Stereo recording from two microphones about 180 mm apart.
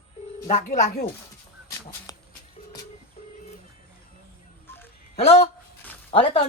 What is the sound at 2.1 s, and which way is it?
Music, 20° left (ahead or behind).